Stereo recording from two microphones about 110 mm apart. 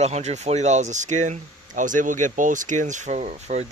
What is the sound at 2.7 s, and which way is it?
Speech, 90° right.